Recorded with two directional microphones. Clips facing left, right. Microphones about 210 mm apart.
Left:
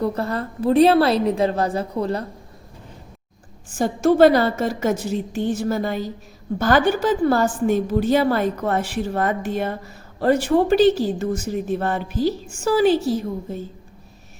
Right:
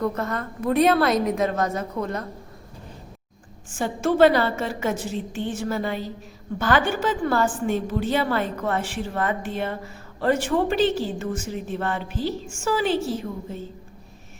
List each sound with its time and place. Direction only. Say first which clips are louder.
0.0 s a woman's voice: left 3 dB; 30° left (ahead or behind)
3.8 s a woman's voice: left 4 dB; 40° left (ahead or behind)